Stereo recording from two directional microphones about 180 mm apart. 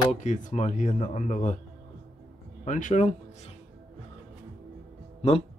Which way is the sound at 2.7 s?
45° left (ahead or behind).